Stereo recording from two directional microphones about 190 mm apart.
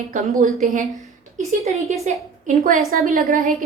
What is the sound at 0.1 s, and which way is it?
Speech, 45° right (ahead or behind).